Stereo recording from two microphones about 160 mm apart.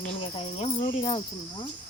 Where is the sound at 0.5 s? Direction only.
40° left (ahead or behind).